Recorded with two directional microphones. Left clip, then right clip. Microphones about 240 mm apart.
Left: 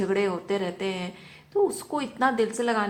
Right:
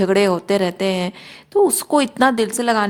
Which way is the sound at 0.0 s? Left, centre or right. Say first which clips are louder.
Right 10 dB; right.